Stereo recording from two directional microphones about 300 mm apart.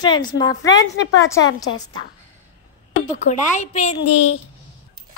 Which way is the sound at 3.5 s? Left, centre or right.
Left.